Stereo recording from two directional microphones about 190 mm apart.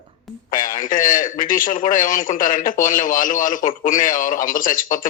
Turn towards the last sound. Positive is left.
turn(degrees=45)  # may be behind; listen again after turning